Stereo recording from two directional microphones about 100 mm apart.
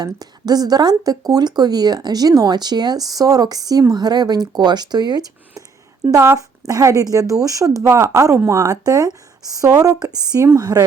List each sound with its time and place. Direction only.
0.0 s speech: 40° right (ahead or behind)
6.1 s speech: 30° right (ahead or behind)